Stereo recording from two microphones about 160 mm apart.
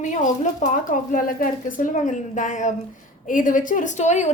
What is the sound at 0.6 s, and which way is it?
Speech, 55° left (ahead or behind).